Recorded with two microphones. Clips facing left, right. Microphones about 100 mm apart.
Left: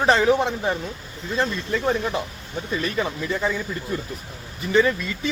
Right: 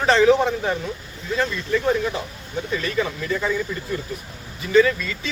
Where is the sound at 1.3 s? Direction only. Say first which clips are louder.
Right 2 dB; 25° left (ahead or behind).